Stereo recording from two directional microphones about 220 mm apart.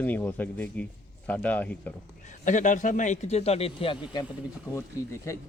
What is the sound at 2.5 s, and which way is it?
A man's voice, 35° left (ahead or behind).